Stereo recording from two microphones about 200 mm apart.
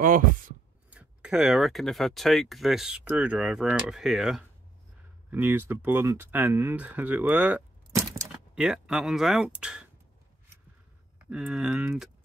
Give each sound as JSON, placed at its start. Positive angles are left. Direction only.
{"t": 0.0, "sound": "speech", "side_deg": -40}
{"t": 0.8, "sound": "speech", "side_deg": -5}
{"t": 7.9, "sound": "crack", "side_deg": -15}
{"t": 8.5, "sound": "speech", "side_deg": -5}
{"t": 11.1, "sound": "speech", "side_deg": -5}